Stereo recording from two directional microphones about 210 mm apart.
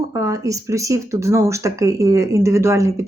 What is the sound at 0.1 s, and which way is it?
Speech, 15° right (ahead or behind).